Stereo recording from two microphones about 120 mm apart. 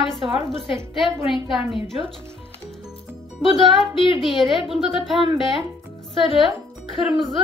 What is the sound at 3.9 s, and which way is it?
Speech, 45° left (ahead or behind).